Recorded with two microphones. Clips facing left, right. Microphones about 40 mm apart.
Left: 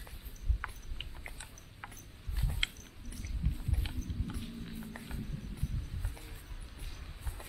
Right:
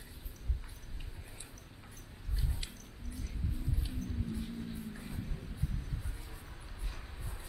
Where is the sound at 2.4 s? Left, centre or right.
Left.